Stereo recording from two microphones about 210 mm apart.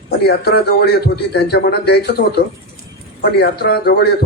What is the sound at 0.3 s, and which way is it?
A man's voice, 50° left (ahead or behind).